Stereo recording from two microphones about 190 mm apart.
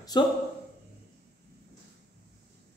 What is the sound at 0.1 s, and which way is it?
Speech, 20° left (ahead or behind).